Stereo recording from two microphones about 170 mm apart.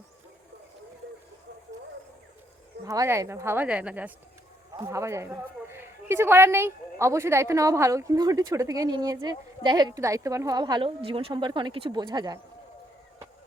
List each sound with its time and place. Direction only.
2.8 s a woman's voice: 20° right (ahead or behind)